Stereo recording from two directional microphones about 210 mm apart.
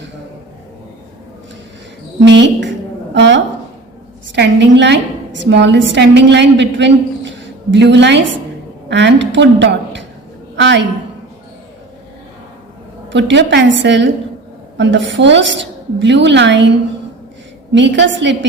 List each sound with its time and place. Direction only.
2.2 s a woman's voice: 55° right (ahead or behind)
13.1 s a woman's voice: 55° right (ahead or behind)
17.7 s a woman's voice: 60° right (ahead or behind)